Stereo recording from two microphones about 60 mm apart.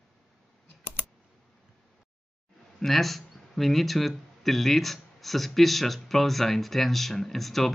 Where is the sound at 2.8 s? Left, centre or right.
Centre.